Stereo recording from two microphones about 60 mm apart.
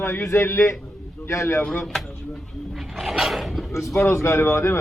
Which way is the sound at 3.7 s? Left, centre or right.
Left.